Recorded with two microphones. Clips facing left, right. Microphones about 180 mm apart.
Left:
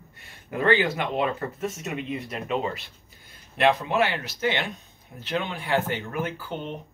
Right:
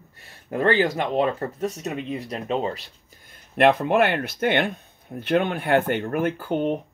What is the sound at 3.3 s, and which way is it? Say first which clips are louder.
Speech: right 4 dB; 55° right (ahead or behind).